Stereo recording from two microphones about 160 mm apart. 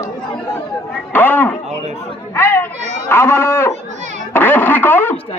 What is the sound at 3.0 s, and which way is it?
Speech, 15° left (ahead or behind).